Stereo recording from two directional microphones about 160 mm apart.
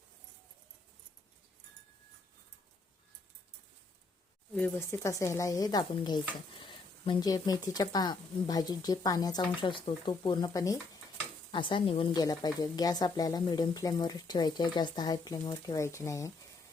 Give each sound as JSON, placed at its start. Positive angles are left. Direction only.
{"t": 4.9, "sound": "speech", "side_deg": 15}
{"t": 11.5, "sound": "speech", "side_deg": 35}